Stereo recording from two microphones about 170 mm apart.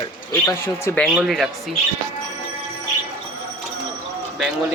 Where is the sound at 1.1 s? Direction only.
Centre (ahead or behind).